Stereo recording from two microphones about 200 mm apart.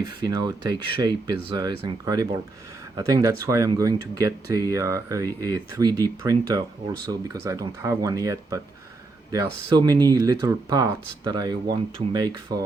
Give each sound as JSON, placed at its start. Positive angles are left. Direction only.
{"t": 0.0, "sound": "speech", "side_deg": -20}